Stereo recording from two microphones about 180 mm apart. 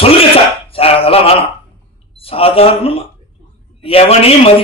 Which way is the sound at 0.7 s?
30° left (ahead or behind).